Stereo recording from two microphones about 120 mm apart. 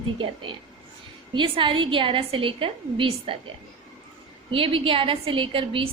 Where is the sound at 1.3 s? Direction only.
45° right (ahead or behind).